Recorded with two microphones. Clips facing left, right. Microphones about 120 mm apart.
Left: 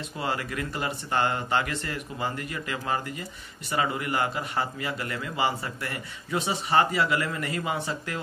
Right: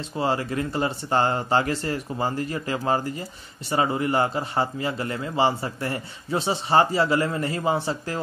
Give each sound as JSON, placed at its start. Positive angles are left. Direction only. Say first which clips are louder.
{"t": 0.2, "sound": "a man's voice", "louder": "right 6 dB", "side_deg": -30}